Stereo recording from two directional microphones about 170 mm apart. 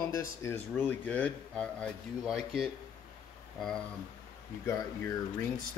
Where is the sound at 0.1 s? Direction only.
15° left (ahead or behind); by 2.7 s centre (ahead or behind).